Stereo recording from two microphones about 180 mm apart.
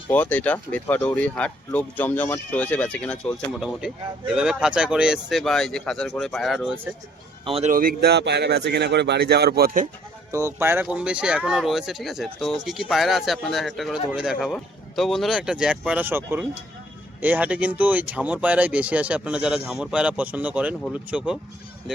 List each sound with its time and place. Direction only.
0.1 s speech: 10° left (ahead or behind)
7.4 s a man's voice: 35° right (ahead or behind)
7.7 s speech: 55° right (ahead or behind)
10.6 s speech: 10° right (ahead or behind)